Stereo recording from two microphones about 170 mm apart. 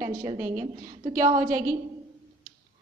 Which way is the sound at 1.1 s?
20° right (ahead or behind).